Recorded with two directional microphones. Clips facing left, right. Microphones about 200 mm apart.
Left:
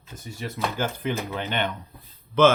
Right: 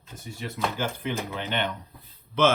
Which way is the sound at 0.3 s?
45° left (ahead or behind).